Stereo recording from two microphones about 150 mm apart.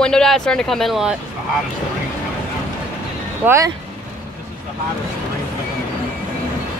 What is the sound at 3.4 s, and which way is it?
Speech, 20° right (ahead or behind).